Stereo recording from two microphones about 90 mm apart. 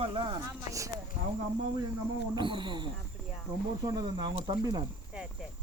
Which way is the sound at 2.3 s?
60° right (ahead or behind).